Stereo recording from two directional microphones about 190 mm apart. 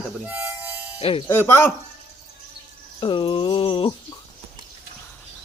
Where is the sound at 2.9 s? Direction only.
25° left (ahead or behind).